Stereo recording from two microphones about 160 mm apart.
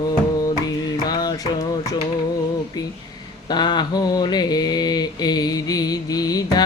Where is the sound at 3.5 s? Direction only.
25° left (ahead or behind).